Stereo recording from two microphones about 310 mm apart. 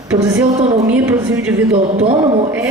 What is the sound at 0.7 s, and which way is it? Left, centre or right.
Speech, centre.